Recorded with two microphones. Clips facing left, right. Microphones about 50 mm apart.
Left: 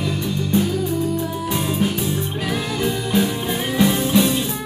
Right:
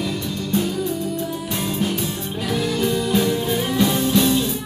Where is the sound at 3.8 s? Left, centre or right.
Centre.